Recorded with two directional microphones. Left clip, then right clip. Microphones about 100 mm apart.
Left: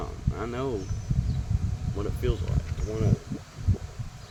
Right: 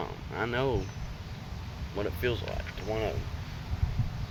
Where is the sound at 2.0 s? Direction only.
20° left (ahead or behind).